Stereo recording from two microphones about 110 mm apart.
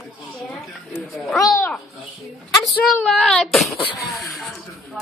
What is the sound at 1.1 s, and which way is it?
Speech, 5° left (ahead or behind).